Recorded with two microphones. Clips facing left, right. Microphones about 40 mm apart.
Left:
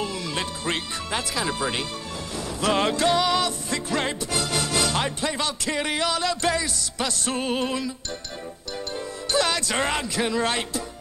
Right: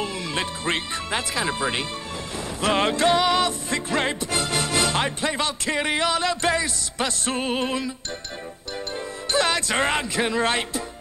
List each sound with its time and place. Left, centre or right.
0.0 s speech: right
2.3 s music: right
7.4 s music: centre
9.3 s speech: right